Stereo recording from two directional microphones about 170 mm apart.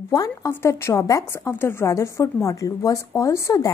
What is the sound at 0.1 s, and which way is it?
Speech, 20° left (ahead or behind).